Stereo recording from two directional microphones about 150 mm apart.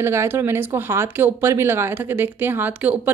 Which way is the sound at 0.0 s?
15° right (ahead or behind).